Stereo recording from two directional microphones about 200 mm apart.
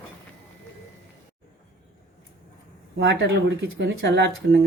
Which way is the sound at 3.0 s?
60° right (ahead or behind).